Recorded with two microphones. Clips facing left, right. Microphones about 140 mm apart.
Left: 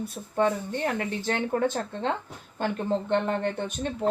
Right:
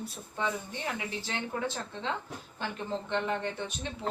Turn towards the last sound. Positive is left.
turn(degrees=50)  # may be behind; listen again after turning